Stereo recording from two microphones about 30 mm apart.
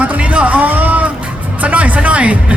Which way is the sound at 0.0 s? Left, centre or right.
Right.